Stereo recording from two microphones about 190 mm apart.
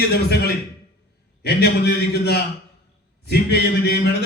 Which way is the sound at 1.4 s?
60° left (ahead or behind).